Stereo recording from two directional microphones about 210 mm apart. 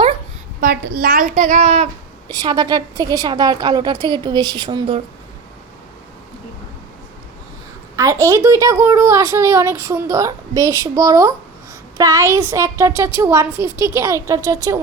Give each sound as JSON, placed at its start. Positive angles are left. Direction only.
{"t": 0.6, "sound": "a woman's voice", "side_deg": -45}
{"t": 2.3, "sound": "a woman's voice", "side_deg": -20}
{"t": 7.9, "sound": "a woman's voice", "side_deg": -15}